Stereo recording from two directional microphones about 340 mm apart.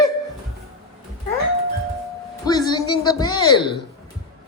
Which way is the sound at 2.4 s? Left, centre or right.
Centre.